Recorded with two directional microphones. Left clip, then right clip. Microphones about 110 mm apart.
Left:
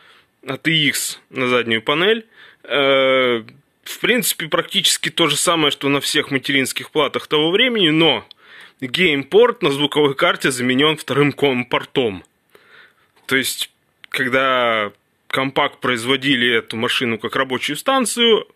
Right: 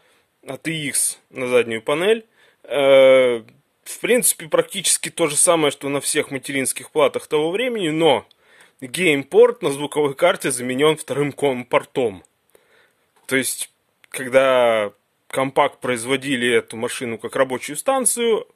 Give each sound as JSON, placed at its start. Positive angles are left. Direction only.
{"t": 0.5, "sound": "speech", "side_deg": -35}
{"t": 13.3, "sound": "speech", "side_deg": -40}